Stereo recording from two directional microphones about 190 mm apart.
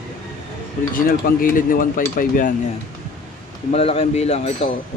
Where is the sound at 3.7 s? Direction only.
30° left (ahead or behind).